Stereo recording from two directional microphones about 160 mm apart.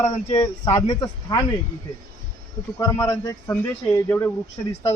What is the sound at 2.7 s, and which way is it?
A man's voice, 20° left (ahead or behind).